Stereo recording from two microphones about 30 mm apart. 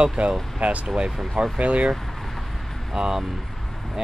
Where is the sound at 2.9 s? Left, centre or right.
Centre.